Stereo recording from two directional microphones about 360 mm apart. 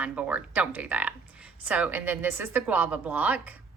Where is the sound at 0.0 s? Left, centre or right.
Centre.